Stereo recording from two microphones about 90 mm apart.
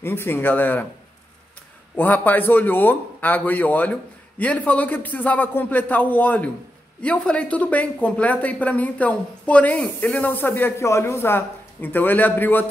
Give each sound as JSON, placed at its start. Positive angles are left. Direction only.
{"t": 0.0, "sound": "a man's voice", "side_deg": 25}
{"t": 2.0, "sound": "a man's voice", "side_deg": 20}